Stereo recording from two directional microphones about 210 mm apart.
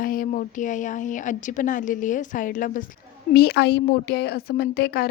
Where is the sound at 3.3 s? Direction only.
50° left (ahead or behind).